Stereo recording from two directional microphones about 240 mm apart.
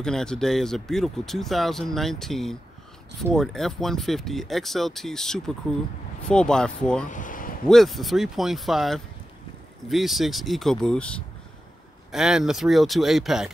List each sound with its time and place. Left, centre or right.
0.0 s speech: centre
7.1 s a sound: left
7.6 s speech: centre